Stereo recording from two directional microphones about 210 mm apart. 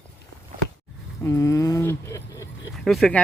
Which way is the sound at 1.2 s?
15° left (ahead or behind).